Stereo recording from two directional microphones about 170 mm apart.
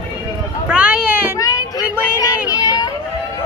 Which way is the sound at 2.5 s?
20° left (ahead or behind).